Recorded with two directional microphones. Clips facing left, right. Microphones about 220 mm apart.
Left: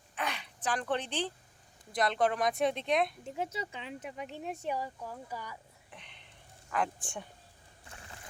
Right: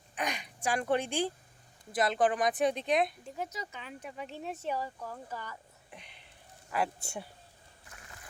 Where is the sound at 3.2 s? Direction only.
25° left (ahead or behind).